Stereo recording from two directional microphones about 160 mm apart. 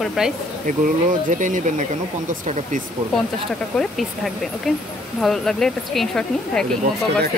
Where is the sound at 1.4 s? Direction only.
55° right (ahead or behind).